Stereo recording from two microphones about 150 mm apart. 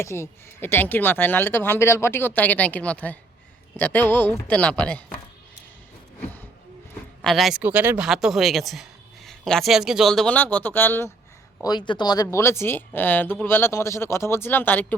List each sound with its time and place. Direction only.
0.0 s speech: 20° left (ahead or behind)
7.2 s speech: centre (ahead or behind)
7.6 s speech: 10° right (ahead or behind); by 11.1 s 15° left (ahead or behind)
11.6 s speech: 30° left (ahead or behind); by 14.9 s 15° left (ahead or behind)